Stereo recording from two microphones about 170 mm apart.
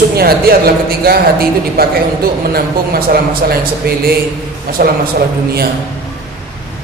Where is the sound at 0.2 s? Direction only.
65° right (ahead or behind).